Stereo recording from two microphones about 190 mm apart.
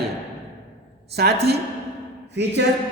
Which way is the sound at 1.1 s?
55° right (ahead or behind).